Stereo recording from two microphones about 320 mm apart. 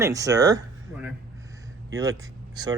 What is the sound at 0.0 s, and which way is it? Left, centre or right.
Speech, centre.